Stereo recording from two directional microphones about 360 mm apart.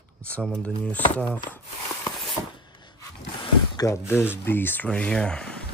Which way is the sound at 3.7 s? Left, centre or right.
Centre.